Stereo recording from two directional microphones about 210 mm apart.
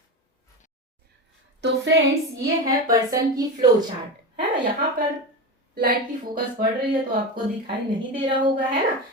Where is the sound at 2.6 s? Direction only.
15° right (ahead or behind).